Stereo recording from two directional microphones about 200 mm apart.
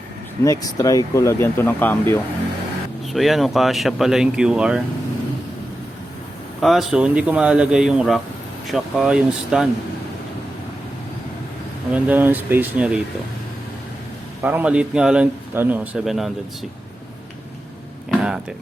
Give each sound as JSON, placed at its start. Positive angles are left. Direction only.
{"t": 0.4, "sound": "speech", "side_deg": 15}
{"t": 3.1, "sound": "speech", "side_deg": 0}
{"t": 6.6, "sound": "speech", "side_deg": 0}
{"t": 11.9, "sound": "a man's voice", "side_deg": -10}
{"t": 14.4, "sound": "a man's voice", "side_deg": -5}
{"t": 18.1, "sound": "music", "side_deg": -5}